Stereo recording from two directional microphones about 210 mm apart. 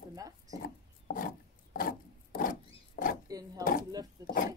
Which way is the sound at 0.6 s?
45° left (ahead or behind).